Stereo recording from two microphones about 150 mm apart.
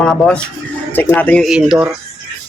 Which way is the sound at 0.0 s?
5° left (ahead or behind).